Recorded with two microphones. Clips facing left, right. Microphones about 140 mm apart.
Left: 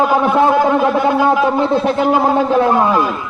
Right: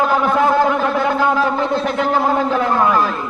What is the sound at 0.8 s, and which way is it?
A man's voice, 15° left (ahead or behind).